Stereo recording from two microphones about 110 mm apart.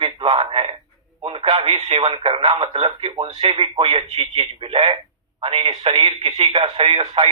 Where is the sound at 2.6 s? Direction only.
55° right (ahead or behind).